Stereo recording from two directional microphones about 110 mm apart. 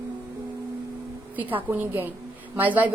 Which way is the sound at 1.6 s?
20° right (ahead or behind).